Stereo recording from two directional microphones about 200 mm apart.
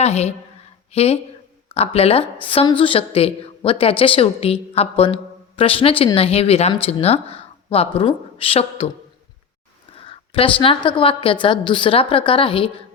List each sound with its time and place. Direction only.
0.0 s a woman's voice: 35° left (ahead or behind)
10.0 s a woman's voice: 25° left (ahead or behind)